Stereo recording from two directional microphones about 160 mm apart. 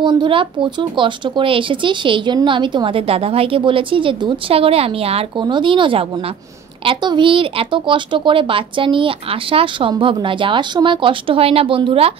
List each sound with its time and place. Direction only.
0.0 s speech: 30° right (ahead or behind)